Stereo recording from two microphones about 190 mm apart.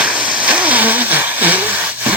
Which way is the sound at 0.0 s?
5° right (ahead or behind).